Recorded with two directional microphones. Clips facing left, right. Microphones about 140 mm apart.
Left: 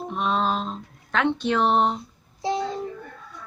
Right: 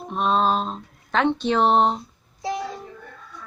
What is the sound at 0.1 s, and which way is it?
Speech, 20° right (ahead or behind).